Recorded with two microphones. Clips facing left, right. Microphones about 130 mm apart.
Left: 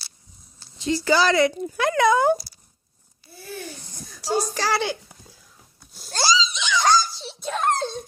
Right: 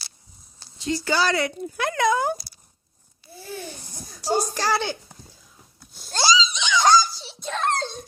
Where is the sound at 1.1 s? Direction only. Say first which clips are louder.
Left 4 dB; 90° left.